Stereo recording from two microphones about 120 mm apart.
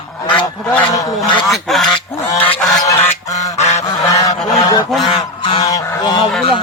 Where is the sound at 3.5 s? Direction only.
65° left (ahead or behind).